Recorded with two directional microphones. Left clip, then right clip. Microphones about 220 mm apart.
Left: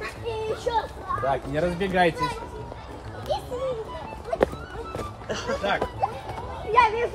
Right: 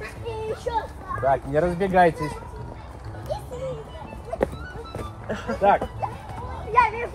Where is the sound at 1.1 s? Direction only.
Centre (ahead or behind).